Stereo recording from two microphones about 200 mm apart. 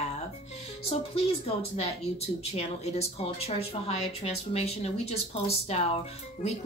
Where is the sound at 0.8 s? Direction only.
30° left (ahead or behind).